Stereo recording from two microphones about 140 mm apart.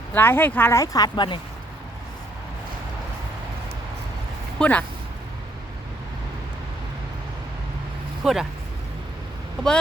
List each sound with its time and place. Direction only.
0.1 s speech: 15° left (ahead or behind); by 1.4 s 35° left (ahead or behind)
4.6 s speech: 10° left (ahead or behind)
8.2 s speech: 5° right (ahead or behind)